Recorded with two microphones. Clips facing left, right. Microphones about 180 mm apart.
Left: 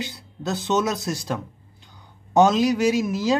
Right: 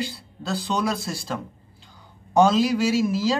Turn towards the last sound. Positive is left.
turn(degrees=20)  # may be behind; listen again after turning